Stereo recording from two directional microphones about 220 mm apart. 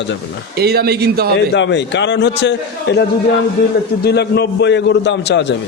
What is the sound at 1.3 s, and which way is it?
A man's voice, 55° left (ahead or behind).